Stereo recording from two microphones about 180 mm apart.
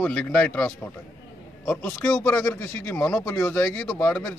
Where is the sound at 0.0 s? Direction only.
5° left (ahead or behind).